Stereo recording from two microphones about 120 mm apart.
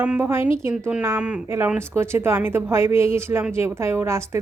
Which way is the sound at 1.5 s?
20° right (ahead or behind).